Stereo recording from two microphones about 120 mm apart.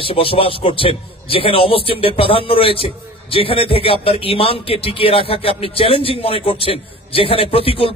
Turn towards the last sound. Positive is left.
turn(degrees=50)  # may be behind; listen again after turning